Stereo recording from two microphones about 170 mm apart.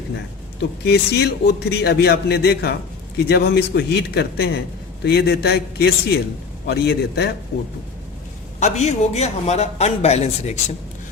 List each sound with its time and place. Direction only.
0.6 s a man's voice: 75° left (ahead or behind)
8.5 s a man's voice: 45° left (ahead or behind)